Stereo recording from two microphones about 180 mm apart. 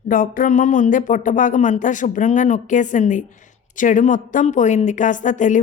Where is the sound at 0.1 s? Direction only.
50° left (ahead or behind).